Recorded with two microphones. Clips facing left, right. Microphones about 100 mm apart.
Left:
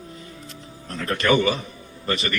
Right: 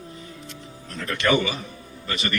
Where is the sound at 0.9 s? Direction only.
40° left (ahead or behind).